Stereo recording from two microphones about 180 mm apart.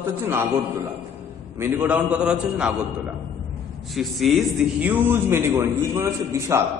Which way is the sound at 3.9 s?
Centre (ahead or behind).